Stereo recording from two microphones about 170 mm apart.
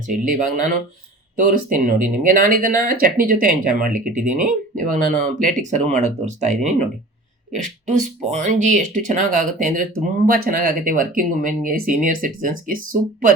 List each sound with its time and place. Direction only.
0.1 s speech: 50° right (ahead or behind)